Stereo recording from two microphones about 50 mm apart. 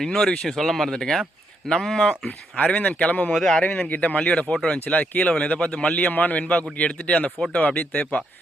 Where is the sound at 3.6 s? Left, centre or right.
Left.